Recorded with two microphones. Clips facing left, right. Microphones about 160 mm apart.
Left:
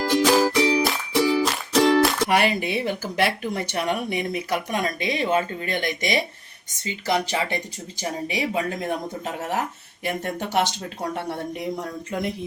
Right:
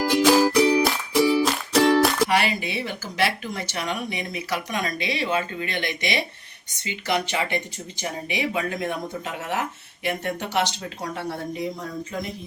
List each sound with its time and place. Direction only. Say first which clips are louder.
0.0 s music: right 1 dB; 5° right (ahead or behind)
2.3 s speech: left 2 dB; 50° left (ahead or behind)